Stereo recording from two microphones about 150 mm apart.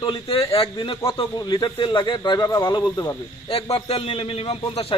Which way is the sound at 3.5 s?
40° left (ahead or behind).